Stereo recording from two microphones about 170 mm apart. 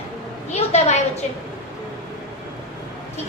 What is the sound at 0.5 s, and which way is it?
Speech, 40° left (ahead or behind).